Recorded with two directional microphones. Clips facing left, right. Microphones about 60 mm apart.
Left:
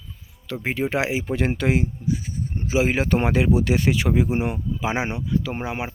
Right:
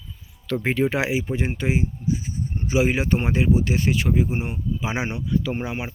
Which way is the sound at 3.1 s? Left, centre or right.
Left.